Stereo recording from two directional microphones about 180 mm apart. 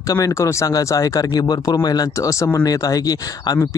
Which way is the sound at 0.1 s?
15° left (ahead or behind).